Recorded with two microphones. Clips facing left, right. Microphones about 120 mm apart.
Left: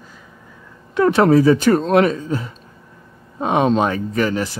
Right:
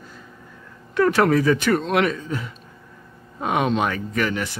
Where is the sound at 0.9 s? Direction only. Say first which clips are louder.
Left 4 dB; 25° left (ahead or behind).